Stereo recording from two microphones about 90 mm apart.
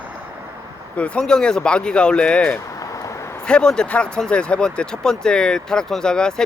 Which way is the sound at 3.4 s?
10° left (ahead or behind).